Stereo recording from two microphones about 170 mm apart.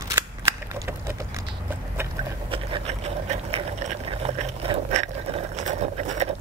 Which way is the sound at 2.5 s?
35° right (ahead or behind).